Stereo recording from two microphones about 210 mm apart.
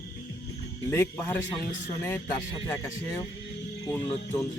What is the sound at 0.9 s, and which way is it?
Speech, 10° left (ahead or behind).